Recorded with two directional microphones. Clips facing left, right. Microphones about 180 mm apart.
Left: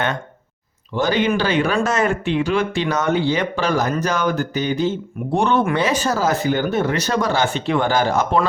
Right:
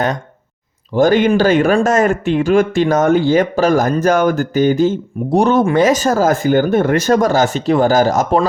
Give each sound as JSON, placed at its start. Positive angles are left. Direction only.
{"t": 0.9, "sound": "speech", "side_deg": -50}